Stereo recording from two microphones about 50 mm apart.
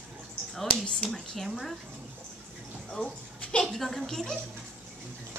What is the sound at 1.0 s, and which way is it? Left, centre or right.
Speech, centre.